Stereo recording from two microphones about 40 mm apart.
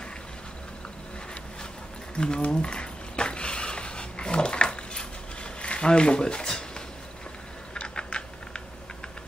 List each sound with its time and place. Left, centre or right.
2.1 s speech: left
2.5 s a sound: left
7.7 s typing: left